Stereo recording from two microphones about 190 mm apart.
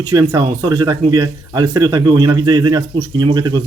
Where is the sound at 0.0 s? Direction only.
15° right (ahead or behind).